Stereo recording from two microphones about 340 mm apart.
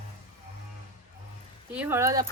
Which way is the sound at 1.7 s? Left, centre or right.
Centre.